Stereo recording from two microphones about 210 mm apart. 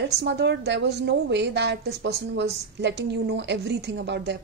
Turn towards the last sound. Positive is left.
turn(degrees=-55)  # may be behind; listen again after turning